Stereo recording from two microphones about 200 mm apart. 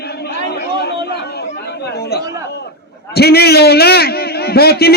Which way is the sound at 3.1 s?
50° left (ahead or behind).